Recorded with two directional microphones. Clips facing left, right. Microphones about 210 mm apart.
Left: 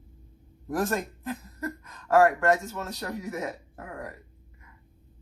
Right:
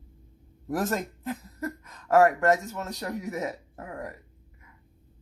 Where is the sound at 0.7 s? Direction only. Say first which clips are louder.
Even; 20° right (ahead or behind).